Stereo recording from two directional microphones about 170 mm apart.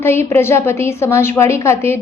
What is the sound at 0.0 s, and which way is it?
A woman's voice, 15° left (ahead or behind).